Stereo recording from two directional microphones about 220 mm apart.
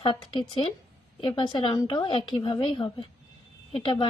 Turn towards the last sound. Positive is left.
turn(degrees=20)  # may be behind; listen again after turning